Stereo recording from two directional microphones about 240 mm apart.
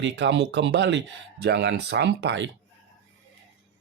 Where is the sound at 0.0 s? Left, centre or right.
Right.